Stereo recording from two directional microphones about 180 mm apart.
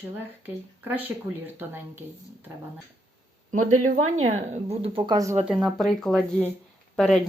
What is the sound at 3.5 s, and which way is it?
Speech, 45° right (ahead or behind).